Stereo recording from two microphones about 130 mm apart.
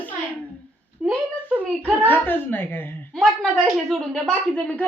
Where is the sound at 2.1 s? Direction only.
15° left (ahead or behind).